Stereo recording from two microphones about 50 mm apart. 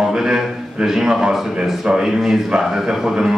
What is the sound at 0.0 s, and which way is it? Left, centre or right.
A man's voice, centre.